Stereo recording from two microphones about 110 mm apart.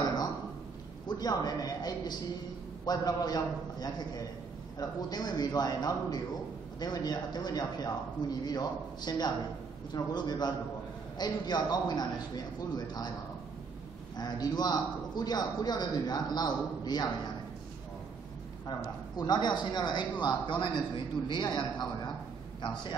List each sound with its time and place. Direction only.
1.0 s a man's voice: 35° left (ahead or behind)
14.1 s a man's voice: 40° left (ahead or behind)
19.1 s a man's voice: 40° left (ahead or behind)